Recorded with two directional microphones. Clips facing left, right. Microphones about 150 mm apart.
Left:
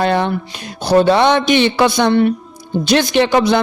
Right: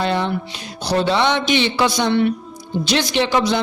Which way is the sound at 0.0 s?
55° left (ahead or behind).